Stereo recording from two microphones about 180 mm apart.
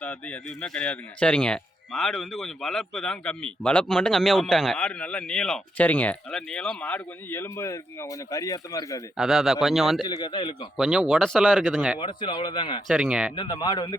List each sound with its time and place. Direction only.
0.0 s speech: 5° left (ahead or behind)
9.1 s speech: centre (ahead or behind)
10.0 s speech: 25° left (ahead or behind)
10.8 s speech: centre (ahead or behind)
11.9 s speech: 30° left (ahead or behind)
12.9 s speech: 5° right (ahead or behind)
13.3 s speech: 25° left (ahead or behind)